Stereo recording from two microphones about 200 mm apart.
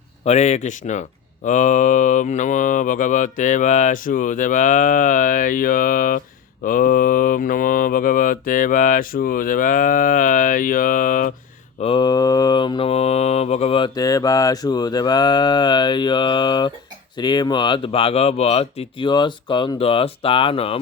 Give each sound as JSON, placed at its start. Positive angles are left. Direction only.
{"t": 0.3, "sound": "speech", "side_deg": 35}
{"t": 6.7, "sound": "mantra", "side_deg": 45}
{"t": 11.8, "sound": "mantra", "side_deg": 25}